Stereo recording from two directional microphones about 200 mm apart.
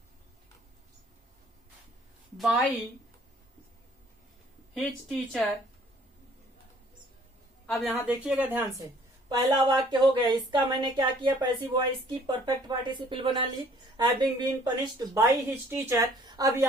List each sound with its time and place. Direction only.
2.4 s a woman's voice: centre (ahead or behind)
4.7 s a woman's voice: centre (ahead or behind)
7.7 s a woman's voice: centre (ahead or behind)
9.6 s a woman's voice: 20° right (ahead or behind)